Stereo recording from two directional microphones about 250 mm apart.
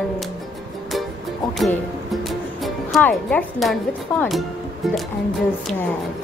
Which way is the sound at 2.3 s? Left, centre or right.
Centre.